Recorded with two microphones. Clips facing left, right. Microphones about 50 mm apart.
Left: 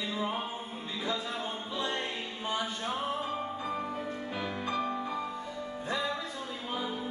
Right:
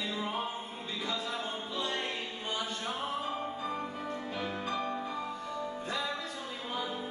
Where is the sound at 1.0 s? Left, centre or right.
Centre.